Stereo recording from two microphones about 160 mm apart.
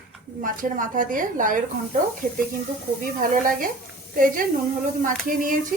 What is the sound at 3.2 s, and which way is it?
A woman's voice, 60° right (ahead or behind).